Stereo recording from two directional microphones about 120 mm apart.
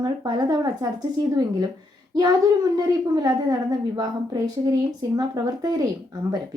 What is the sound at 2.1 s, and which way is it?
A woman's voice, 35° right (ahead or behind).